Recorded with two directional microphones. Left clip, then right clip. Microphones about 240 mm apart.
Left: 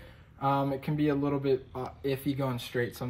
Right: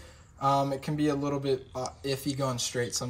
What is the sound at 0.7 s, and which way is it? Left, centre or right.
Speech, right.